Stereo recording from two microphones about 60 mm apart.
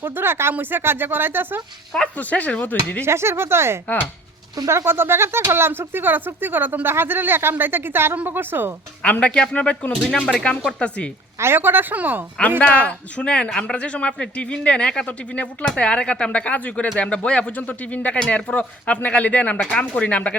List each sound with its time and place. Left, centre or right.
0.0 s speech: right
2.1 s speech: left
3.0 s speech: right
4.9 s speech: right
9.0 s speech: left
9.9 s speech: centre
11.3 s speech: right
12.4 s speech: centre
17.0 s speech: centre